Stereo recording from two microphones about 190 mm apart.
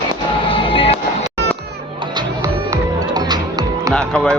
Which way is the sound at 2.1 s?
20° right (ahead or behind).